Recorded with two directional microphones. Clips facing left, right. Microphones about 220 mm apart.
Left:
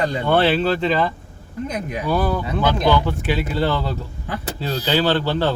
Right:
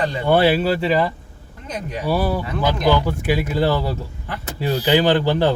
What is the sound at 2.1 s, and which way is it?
Speech, 10° right (ahead or behind).